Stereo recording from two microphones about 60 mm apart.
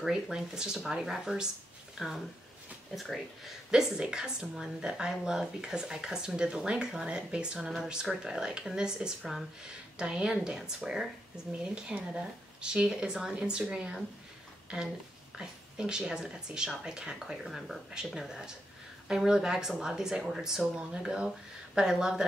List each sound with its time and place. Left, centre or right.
0.0 s a woman's voice: centre
15.3 s a woman's voice: centre